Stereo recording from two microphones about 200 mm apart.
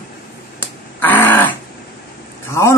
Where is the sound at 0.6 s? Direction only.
10° left (ahead or behind).